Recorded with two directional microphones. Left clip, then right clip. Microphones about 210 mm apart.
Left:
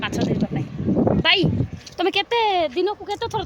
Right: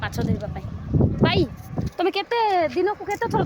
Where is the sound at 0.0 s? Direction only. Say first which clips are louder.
Left 4 dB; 10° left (ahead or behind).